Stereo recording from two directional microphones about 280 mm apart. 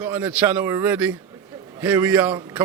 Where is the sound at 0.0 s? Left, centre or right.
Centre.